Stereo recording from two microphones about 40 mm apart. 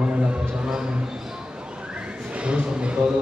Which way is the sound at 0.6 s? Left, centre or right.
Centre.